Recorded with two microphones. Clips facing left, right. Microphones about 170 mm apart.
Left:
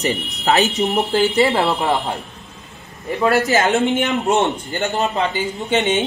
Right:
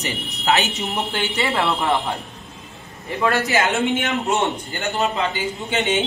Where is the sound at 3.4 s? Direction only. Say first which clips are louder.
Left 4 dB; 40° left (ahead or behind).